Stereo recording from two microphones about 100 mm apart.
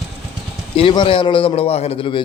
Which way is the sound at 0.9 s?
55° left (ahead or behind).